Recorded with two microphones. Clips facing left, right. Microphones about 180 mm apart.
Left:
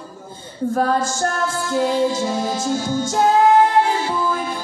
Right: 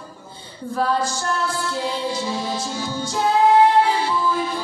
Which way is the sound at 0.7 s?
45° left (ahead or behind).